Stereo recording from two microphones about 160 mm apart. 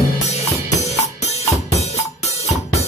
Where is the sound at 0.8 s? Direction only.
40° left (ahead or behind).